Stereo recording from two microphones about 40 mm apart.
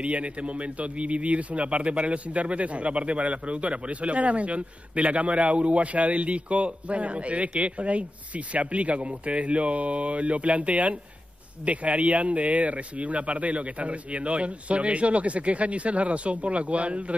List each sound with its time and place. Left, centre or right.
0.0 s a man's voice: right